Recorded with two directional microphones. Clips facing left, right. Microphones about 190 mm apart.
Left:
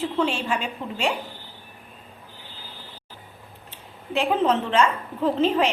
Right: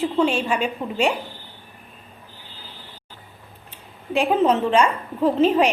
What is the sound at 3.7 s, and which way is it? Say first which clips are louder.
A woman's voice: right 3 dB; 15° right (ahead or behind).